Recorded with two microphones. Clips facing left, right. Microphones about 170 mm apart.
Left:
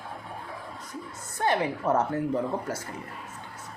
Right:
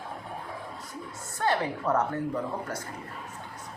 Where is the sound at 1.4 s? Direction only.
20° left (ahead or behind).